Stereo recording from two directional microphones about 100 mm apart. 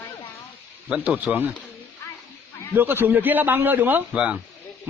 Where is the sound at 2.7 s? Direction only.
20° right (ahead or behind).